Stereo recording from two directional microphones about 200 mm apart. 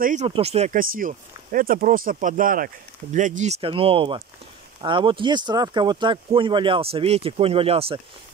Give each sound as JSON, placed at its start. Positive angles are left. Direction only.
{"t": 0.0, "sound": "speech", "side_deg": -35}